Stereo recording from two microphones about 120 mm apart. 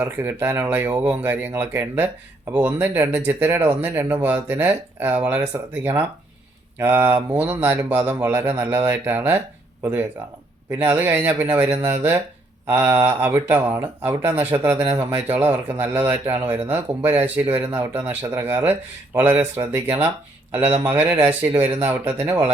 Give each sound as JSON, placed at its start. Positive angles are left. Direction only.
{"t": 0.0, "sound": "speech", "side_deg": -15}